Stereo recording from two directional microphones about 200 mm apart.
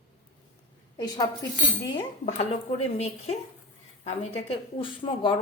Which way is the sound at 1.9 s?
30° left (ahead or behind).